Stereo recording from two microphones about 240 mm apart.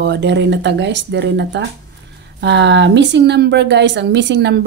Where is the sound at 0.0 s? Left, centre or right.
Right.